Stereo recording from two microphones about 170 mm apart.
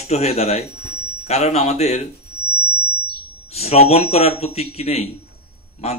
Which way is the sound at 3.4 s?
40° left (ahead or behind).